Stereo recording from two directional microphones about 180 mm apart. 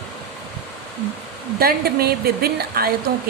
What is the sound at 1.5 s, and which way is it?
Speech, 55° right (ahead or behind).